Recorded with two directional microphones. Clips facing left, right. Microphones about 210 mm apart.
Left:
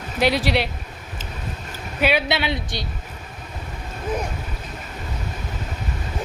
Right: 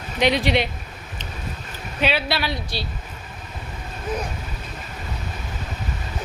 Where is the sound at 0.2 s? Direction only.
5° left (ahead or behind).